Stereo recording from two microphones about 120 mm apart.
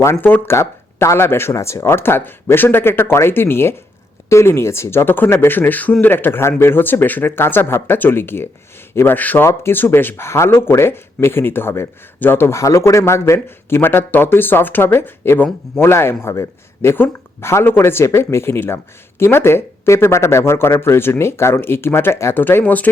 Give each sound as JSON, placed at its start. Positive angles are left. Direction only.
{"t": 0.0, "sound": "speech", "side_deg": 20}